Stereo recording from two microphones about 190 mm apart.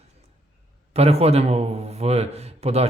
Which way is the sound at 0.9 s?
35° right (ahead or behind).